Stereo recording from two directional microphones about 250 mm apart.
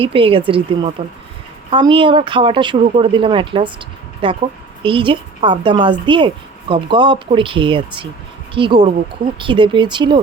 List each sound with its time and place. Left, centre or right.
0.0 s speech: right